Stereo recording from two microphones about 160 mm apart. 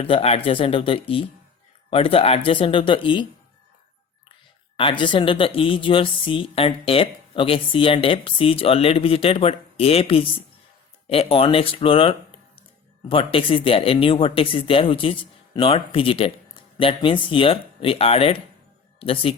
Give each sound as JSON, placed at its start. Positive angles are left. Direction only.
{"t": 0.0, "sound": "a woman's voice", "side_deg": 35}
{"t": 4.8, "sound": "a woman's voice", "side_deg": 30}